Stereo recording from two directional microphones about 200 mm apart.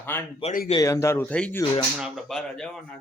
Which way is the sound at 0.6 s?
20° left (ahead or behind).